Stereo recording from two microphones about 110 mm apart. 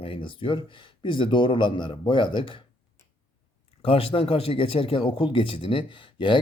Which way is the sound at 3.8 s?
55° left (ahead or behind).